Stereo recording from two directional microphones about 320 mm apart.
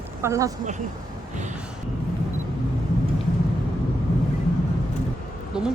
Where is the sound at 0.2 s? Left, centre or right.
Centre.